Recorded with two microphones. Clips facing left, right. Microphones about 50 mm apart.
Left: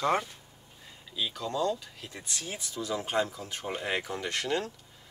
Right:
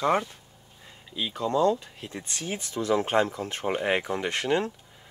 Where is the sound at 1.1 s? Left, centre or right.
Right.